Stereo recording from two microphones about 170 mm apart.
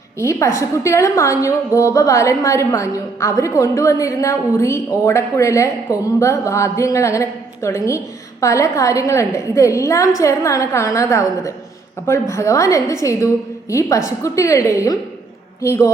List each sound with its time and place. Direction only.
0.2 s a woman's voice: 15° left (ahead or behind)